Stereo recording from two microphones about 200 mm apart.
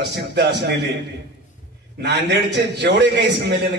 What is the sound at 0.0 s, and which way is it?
Speech, 55° right (ahead or behind).